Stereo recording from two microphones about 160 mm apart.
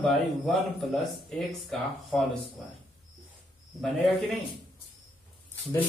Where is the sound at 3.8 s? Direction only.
Centre (ahead or behind).